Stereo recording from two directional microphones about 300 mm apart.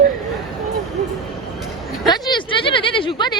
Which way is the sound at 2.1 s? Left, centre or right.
Centre.